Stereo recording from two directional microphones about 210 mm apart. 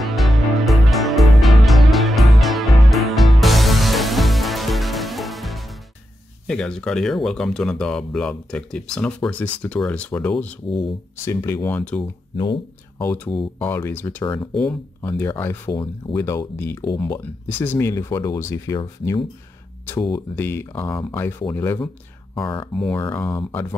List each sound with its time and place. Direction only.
0.0 s music: centre (ahead or behind)
6.4 s speech: 5° left (ahead or behind)
12.0 s speech: 20° left (ahead or behind)
13.0 s speech: 10° left (ahead or behind)
20.1 s speech: 10° left (ahead or behind)
22.3 s speech: 25° left (ahead or behind)
22.8 s speech: 5° left (ahead or behind)